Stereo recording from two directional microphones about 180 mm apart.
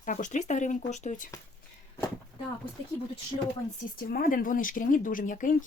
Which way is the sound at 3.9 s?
50° left (ahead or behind).